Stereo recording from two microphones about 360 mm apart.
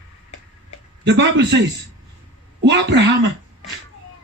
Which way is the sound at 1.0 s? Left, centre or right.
Right.